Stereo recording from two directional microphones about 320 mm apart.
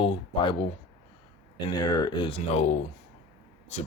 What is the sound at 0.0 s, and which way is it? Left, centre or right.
Speech, centre.